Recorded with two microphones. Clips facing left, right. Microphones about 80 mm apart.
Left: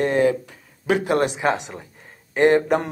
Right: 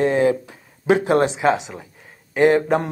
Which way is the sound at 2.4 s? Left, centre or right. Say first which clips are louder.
Right 1 dB; centre.